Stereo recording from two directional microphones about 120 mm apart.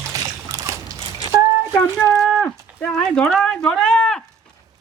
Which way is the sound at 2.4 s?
15° left (ahead or behind).